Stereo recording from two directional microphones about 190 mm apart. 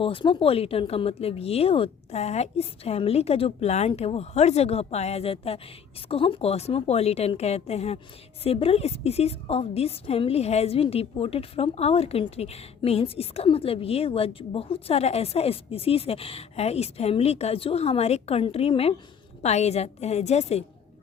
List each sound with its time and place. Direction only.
0.0 s a woman's voice: 25° left (ahead or behind)